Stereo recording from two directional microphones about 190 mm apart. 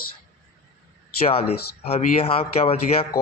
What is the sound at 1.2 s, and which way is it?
A man's voice, 30° left (ahead or behind).